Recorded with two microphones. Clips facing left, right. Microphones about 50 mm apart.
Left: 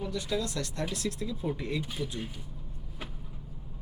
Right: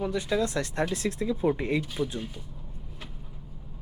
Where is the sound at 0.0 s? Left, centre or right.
Right.